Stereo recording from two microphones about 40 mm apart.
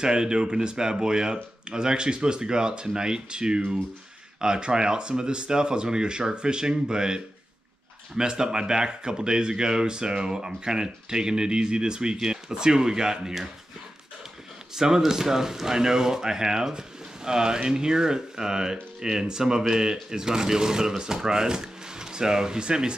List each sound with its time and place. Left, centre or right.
0.0 s speech: centre
14.8 s speech: centre